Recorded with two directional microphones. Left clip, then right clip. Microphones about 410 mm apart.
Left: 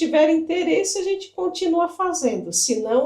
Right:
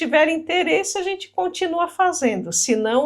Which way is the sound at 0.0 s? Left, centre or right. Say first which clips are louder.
Even; centre.